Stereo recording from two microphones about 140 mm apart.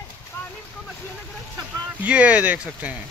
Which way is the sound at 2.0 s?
10° right (ahead or behind).